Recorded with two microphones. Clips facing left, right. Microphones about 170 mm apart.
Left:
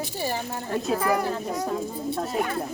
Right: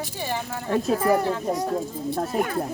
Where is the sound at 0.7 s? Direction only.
45° right (ahead or behind).